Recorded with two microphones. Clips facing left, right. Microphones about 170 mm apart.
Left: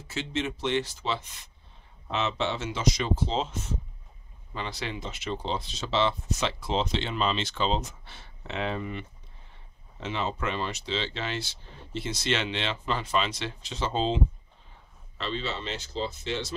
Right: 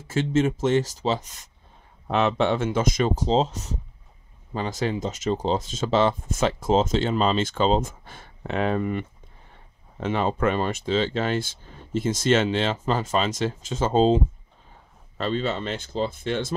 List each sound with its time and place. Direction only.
0.1 s speech: 45° right (ahead or behind)
2.0 s speech: 55° right (ahead or behind)